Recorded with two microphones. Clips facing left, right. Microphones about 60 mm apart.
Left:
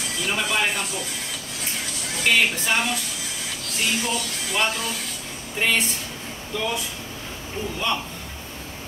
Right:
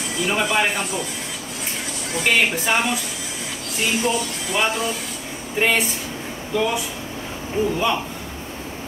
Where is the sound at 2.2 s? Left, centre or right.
Centre.